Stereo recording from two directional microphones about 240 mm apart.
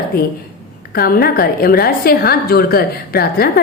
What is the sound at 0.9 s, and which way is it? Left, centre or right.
A woman's voice, left.